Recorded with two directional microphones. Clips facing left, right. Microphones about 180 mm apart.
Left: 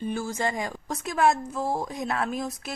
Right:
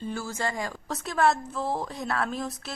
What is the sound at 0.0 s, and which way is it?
Speech, 15° left (ahead or behind).